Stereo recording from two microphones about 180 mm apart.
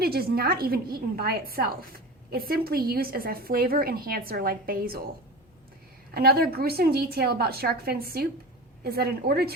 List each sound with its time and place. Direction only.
0.0 s a woman's voice: 60° right (ahead or behind)
6.1 s a woman's voice: 60° right (ahead or behind)